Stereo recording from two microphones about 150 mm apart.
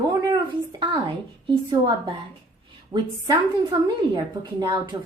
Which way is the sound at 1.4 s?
30° right (ahead or behind).